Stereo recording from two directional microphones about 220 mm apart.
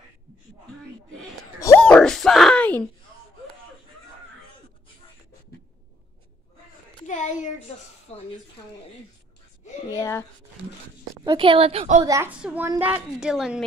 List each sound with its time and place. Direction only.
1.6 s a sound: 10° left (ahead or behind)
7.1 s speech: 30° left (ahead or behind)
9.8 s speech: 15° left (ahead or behind)
11.2 s a woman's voice: 25° right (ahead or behind)
12.1 s a woman's voice: 10° right (ahead or behind)